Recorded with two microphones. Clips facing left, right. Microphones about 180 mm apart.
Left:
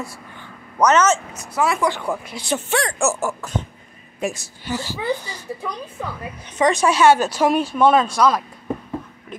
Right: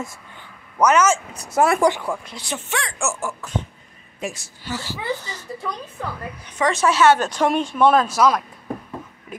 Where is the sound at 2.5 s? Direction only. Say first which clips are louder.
Left 6 dB; 40° left (ahead or behind).